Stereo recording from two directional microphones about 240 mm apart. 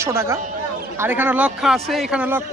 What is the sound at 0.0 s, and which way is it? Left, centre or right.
A man's voice, centre.